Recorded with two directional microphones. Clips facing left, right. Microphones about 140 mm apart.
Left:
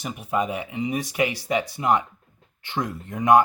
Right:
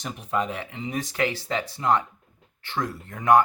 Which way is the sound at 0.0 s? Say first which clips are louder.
Left 2 dB; 5° left (ahead or behind).